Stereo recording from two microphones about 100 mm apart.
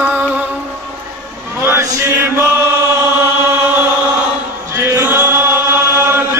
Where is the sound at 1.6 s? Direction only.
25° right (ahead or behind).